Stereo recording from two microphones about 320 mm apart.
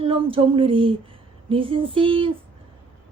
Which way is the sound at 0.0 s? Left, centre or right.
Centre.